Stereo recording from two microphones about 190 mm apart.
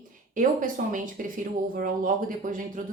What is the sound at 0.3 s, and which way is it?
Speech, 45° right (ahead or behind).